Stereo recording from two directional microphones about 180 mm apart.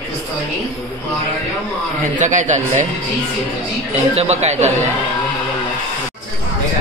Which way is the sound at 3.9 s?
35° right (ahead or behind).